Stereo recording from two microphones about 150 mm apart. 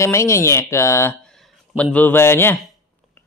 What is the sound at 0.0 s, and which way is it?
Speech, 20° left (ahead or behind).